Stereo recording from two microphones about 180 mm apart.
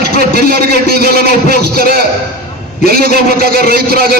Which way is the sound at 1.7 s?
55° right (ahead or behind).